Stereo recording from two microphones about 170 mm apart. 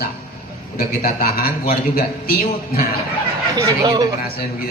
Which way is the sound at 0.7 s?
60° left (ahead or behind).